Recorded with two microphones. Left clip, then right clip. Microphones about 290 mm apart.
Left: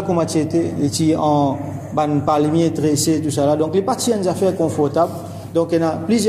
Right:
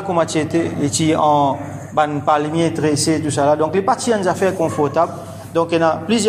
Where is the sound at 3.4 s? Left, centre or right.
Right.